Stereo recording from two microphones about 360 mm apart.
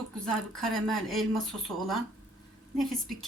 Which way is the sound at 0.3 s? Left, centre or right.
Centre.